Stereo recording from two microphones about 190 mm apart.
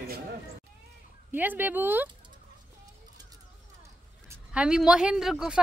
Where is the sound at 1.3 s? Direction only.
10° right (ahead or behind).